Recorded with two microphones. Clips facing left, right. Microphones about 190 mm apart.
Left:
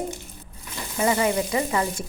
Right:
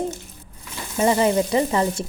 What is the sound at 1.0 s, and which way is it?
A woman's voice, 30° right (ahead or behind).